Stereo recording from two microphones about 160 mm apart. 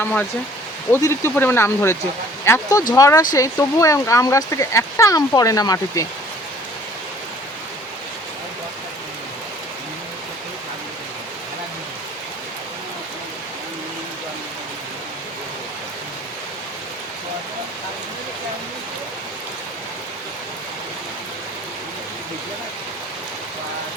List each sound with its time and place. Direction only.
0.0 s speech: 10° left (ahead or behind)